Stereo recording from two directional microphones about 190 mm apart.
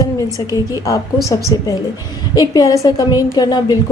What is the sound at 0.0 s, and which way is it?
A woman's voice, 20° left (ahead or behind).